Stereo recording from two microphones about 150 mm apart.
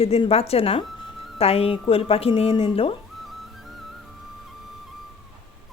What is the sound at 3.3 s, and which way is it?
Music, centre (ahead or behind).